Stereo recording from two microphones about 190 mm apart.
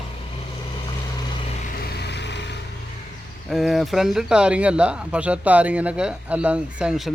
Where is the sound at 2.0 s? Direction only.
65° left (ahead or behind).